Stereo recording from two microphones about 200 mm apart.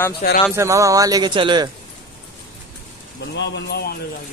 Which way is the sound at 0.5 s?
15° right (ahead or behind).